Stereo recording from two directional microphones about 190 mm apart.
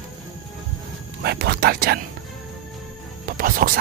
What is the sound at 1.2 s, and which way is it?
Speech, 60° right (ahead or behind).